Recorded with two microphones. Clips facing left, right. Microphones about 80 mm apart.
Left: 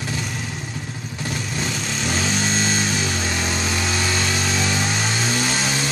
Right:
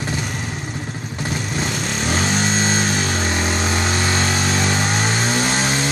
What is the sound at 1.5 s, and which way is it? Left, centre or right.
Vehicle, right.